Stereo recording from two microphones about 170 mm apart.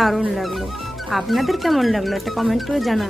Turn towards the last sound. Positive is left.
turn(degrees=0)  # may be behind; listen again after turning